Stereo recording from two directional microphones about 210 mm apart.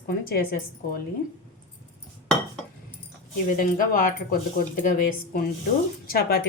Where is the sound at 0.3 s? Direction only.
45° left (ahead or behind).